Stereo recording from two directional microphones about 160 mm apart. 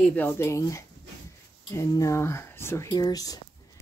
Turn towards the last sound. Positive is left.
turn(degrees=25)  # may be behind; listen again after turning